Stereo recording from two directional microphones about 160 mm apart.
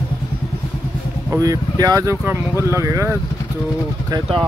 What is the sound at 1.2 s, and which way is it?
Speech, 20° right (ahead or behind).